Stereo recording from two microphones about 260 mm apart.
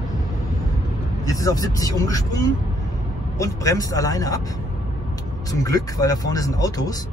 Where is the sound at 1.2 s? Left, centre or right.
Centre.